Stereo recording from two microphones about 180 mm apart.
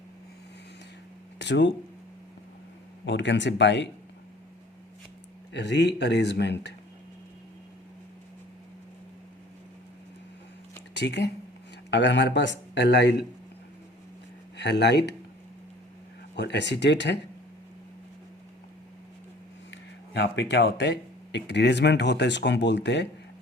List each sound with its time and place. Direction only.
1.4 s speech: 80° left
3.1 s speech: 80° left
5.5 s speech: 75° left (ahead or behind)
10.9 s speech: 70° left (ahead or behind)
14.5 s speech: 70° left (ahead or behind)
16.3 s speech: 70° left (ahead or behind)
19.7 s speech: 75° left (ahead or behind)